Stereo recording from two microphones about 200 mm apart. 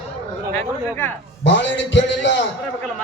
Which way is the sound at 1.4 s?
65° left (ahead or behind).